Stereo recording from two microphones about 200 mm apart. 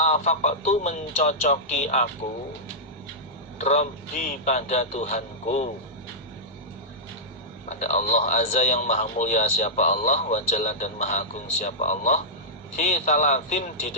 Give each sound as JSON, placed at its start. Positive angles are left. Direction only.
{"t": 0.0, "sound": "a man's voice", "side_deg": 35}
{"t": 3.6, "sound": "a man's voice", "side_deg": 35}
{"t": 7.7, "sound": "a man's voice", "side_deg": 35}